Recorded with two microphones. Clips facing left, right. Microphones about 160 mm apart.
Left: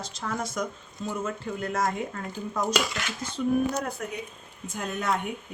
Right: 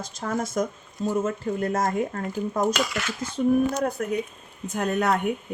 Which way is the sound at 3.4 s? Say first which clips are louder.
Right 4 dB; 45° right (ahead or behind).